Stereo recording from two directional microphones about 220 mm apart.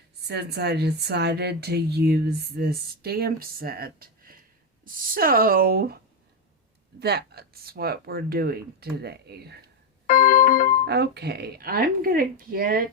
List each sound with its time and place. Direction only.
0.3 s speech: 50° right (ahead or behind)
7.0 s speech: 45° right (ahead or behind)
10.1 s organ: 40° left (ahead or behind)
10.8 s speech: 50° right (ahead or behind)